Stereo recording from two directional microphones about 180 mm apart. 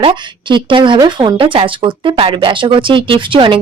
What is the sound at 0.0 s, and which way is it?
A woman's voice, 30° right (ahead or behind).